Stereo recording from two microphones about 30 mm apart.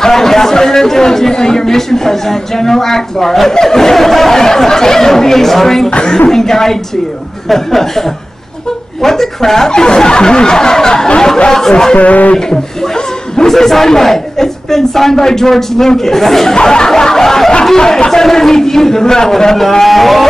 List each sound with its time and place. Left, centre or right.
0.0 s a man's voice: centre
4.4 s a man's voice: centre
5.9 s a woman's voice: left
6.3 s a man's voice: centre
9.0 s a man's voice: centre
9.7 s snicker: left
11.9 s speech: left
13.5 s a man's voice: centre
16.6 s a man's voice: centre